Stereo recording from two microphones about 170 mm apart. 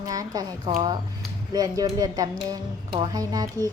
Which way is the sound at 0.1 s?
20° right (ahead or behind).